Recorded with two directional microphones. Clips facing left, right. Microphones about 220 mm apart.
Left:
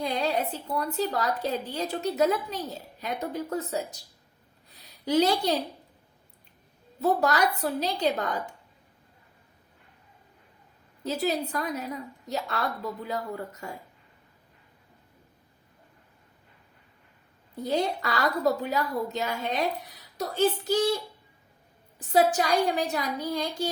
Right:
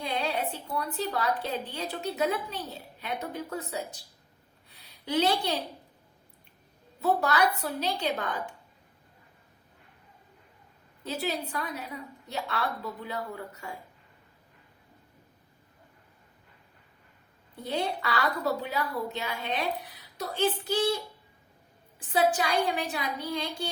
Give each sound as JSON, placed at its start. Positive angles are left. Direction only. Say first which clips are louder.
{"t": 0.0, "sound": "a woman's voice", "louder": "left 3 dB", "side_deg": 40}
{"t": 5.0, "sound": "a woman's voice", "louder": "left 4 dB", "side_deg": 40}
{"t": 7.0, "sound": "a woman's voice", "louder": "left 2 dB", "side_deg": 40}
{"t": 11.0, "sound": "a woman's voice", "louder": "left 4 dB", "side_deg": 40}
{"t": 17.6, "sound": "a woman's voice", "louder": "left 4 dB", "side_deg": 40}
{"t": 21.9, "sound": "a woman's voice", "louder": "left 3 dB", "side_deg": 40}